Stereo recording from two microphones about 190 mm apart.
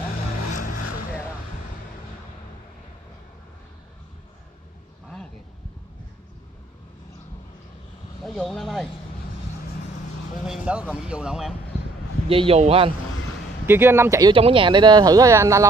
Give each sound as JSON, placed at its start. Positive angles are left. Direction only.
{"t": 0.1, "sound": "vehicle", "side_deg": 45}
{"t": 8.2, "sound": "speech", "side_deg": 0}
{"t": 10.4, "sound": "speech", "side_deg": -5}
{"t": 12.3, "sound": "speech", "side_deg": -30}
{"t": 13.7, "sound": "speech", "side_deg": -10}
{"t": 14.3, "sound": "speech", "side_deg": -25}